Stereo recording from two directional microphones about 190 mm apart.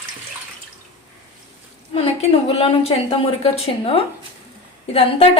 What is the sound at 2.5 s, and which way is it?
A woman's voice, 30° left (ahead or behind).